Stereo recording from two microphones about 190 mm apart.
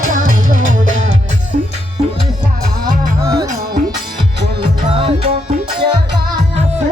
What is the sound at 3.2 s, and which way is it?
Music, 15° right (ahead or behind).